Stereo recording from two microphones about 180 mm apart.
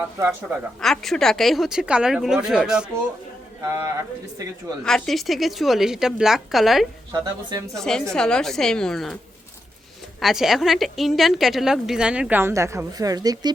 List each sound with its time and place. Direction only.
0.8 s a woman's voice: centre (ahead or behind)
3.7 s a man's voice: 15° right (ahead or behind)
4.9 s a woman's voice: centre (ahead or behind)
7.1 s speech: 20° right (ahead or behind)
7.8 s a woman's voice: 5° left (ahead or behind)
10.2 s a woman's voice: centre (ahead or behind); by 13.5 s 20° right (ahead or behind)